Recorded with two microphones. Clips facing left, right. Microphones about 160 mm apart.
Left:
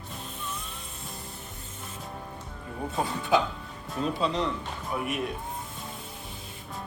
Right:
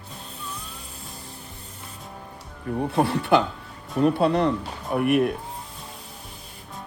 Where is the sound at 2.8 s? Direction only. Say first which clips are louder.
Right 6 dB; 70° right (ahead or behind).